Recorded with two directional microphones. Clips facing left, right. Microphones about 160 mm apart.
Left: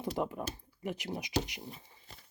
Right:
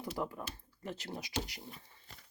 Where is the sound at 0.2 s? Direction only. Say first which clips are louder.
Left 4 dB; 20° left (ahead or behind).